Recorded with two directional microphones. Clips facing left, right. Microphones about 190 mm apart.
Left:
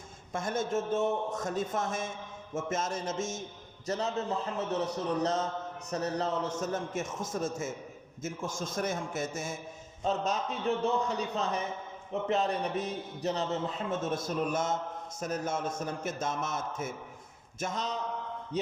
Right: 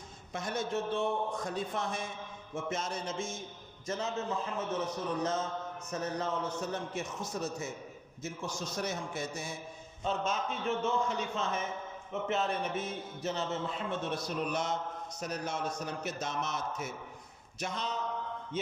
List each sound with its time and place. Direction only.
0.3 s a man's voice: 50° left (ahead or behind)
10.0 s a man's voice: 40° left (ahead or behind)